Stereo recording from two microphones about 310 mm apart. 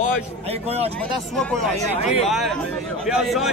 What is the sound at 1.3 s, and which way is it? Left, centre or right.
Speech, centre.